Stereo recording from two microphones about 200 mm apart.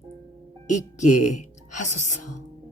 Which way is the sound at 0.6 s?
35° left (ahead or behind).